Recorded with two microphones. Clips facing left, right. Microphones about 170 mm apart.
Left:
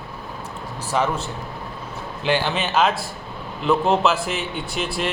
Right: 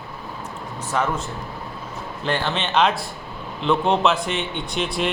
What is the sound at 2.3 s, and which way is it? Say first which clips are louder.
A man's voice: left 2 dB; 5° left (ahead or behind).